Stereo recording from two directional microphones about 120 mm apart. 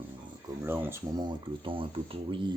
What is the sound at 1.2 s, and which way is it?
Speech, 40° right (ahead or behind).